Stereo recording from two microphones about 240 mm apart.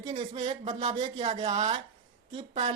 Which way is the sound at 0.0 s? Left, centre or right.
Right.